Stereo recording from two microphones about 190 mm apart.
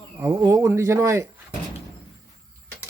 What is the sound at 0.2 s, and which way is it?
Speech, 15° right (ahead or behind).